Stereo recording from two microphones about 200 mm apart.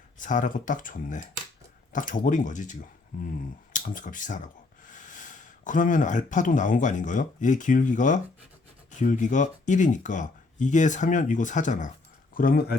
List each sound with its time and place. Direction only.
0.2 s speech: 40° left (ahead or behind)